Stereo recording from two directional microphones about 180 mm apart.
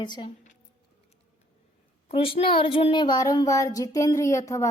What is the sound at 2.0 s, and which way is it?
A woman's voice, 30° left (ahead or behind).